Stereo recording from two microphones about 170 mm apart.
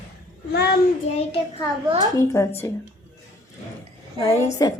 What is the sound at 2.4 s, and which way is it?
Speech, 20° left (ahead or behind).